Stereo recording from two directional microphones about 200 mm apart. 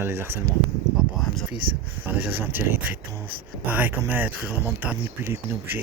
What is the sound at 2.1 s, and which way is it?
Speech, 10° right (ahead or behind).